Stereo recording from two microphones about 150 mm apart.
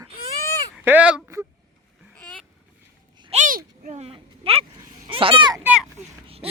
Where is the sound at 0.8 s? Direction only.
10° right (ahead or behind).